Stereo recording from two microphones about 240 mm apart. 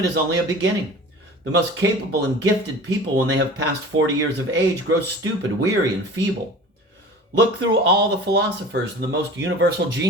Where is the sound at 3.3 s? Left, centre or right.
Right.